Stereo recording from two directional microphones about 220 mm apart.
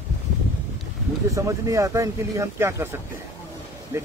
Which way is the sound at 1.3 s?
15° right (ahead or behind).